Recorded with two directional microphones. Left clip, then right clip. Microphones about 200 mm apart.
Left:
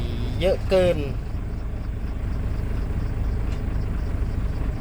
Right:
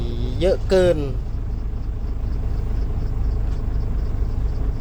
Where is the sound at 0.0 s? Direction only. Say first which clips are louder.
Right 2 dB; 20° right (ahead or behind).